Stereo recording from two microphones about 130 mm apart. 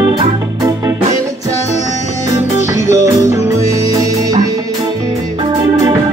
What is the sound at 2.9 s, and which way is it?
Music, 25° right (ahead or behind).